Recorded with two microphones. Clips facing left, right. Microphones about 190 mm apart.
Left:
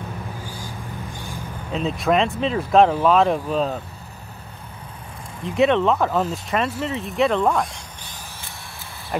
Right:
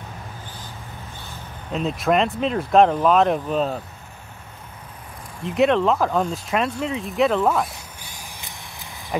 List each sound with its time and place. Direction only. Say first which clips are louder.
0.4 s a sound: left 5 dB; 10° left (ahead or behind)
1.7 s speech: even; centre (ahead or behind)
5.6 s speech: even; centre (ahead or behind)